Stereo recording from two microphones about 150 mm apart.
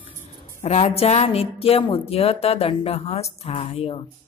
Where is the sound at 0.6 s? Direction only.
45° left (ahead or behind).